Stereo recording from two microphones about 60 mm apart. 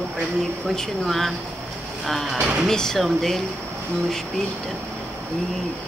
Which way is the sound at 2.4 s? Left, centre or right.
Right.